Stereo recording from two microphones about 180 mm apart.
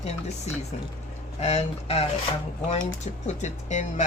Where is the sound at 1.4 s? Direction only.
35° left (ahead or behind).